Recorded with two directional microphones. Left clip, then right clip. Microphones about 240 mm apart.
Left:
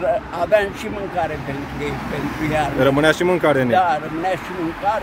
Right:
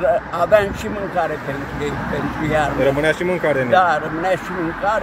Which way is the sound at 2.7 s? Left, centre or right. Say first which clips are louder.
Left 1 dB; left.